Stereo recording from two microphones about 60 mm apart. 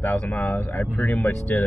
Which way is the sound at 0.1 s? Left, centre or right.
Left.